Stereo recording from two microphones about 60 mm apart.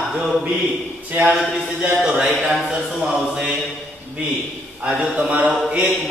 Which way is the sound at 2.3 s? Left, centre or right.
Centre.